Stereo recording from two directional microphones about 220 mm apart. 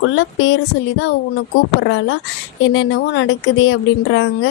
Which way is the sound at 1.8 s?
55° left (ahead or behind).